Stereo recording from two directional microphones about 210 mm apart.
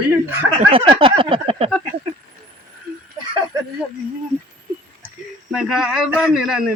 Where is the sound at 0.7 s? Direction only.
25° right (ahead or behind).